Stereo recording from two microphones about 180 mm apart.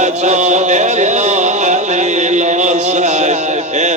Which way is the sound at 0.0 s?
40° right (ahead or behind).